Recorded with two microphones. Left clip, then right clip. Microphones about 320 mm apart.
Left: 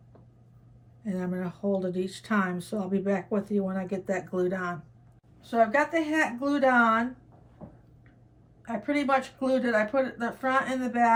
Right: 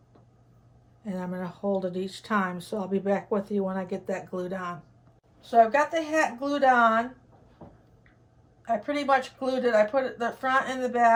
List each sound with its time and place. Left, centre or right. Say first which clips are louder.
1.0 s speech: left 1 dB; centre
8.6 s speech: right 2 dB; centre